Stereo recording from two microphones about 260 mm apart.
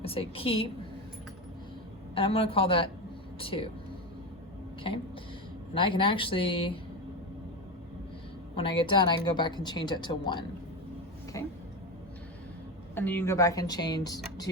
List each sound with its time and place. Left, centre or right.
0.0 s speech: left
2.1 s speech: left
5.7 s speech: centre
8.5 s a woman's voice: centre
11.3 s a sound: centre
12.9 s a woman's voice: centre